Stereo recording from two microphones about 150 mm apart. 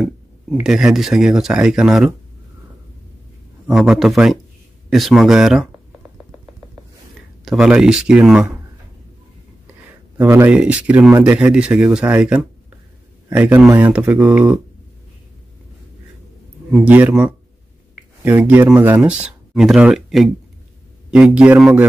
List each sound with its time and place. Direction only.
0.7 s speech: 5° right (ahead or behind)
3.6 s speech: centre (ahead or behind)
7.4 s speech: 5° right (ahead or behind)
10.2 s speech: 20° right (ahead or behind)
10.5 s speech: 5° right (ahead or behind)
16.7 s speech: 10° right (ahead or behind)
18.4 s speech: 5° right (ahead or behind)